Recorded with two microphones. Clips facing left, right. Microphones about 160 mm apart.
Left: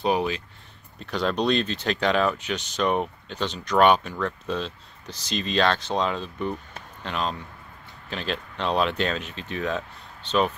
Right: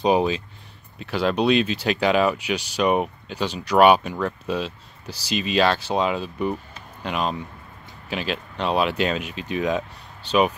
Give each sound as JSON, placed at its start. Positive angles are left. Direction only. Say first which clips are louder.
{"t": 0.0, "sound": "speech", "louder": "right 4 dB", "side_deg": -20}
{"t": 0.9, "sound": "speech", "louder": "right 3 dB", "side_deg": -5}